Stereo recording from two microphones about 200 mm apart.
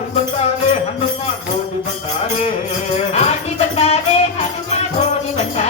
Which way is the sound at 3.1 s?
35° left (ahead or behind).